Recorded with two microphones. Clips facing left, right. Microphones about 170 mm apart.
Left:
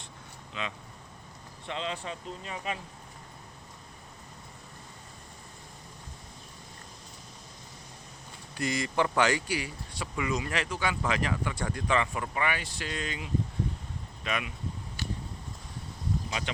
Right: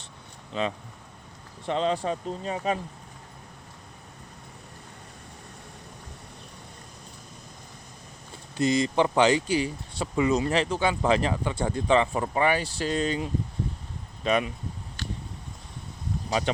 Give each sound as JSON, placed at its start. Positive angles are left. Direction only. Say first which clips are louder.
{"t": 0.5, "sound": "speech", "louder": "right 9 dB", "side_deg": -35}
{"t": 8.5, "sound": "speech", "louder": "right 6 dB", "side_deg": -25}
{"t": 15.0, "sound": "a sound", "louder": "right 1 dB", "side_deg": 10}